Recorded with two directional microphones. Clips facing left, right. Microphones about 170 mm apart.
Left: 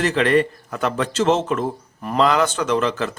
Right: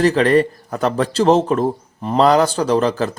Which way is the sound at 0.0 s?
35° right (ahead or behind).